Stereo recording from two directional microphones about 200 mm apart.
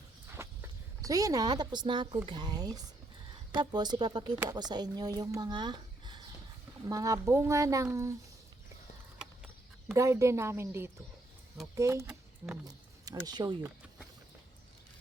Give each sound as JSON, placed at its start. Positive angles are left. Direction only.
{"t": 0.3, "sound": "a sound", "side_deg": -15}
{"t": 2.2, "sound": "speech", "side_deg": -20}
{"t": 9.9, "sound": "speech", "side_deg": -15}